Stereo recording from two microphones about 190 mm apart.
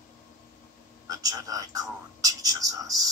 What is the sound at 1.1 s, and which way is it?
Speech, 20° right (ahead or behind).